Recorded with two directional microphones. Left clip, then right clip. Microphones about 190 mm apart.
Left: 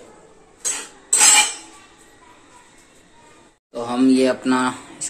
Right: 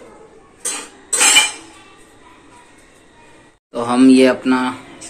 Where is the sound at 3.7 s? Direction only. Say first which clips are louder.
Right 6 dB; centre (ahead or behind).